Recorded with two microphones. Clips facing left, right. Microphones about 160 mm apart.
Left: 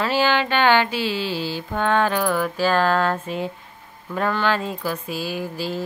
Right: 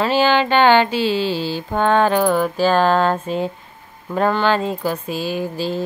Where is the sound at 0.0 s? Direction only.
25° right (ahead or behind).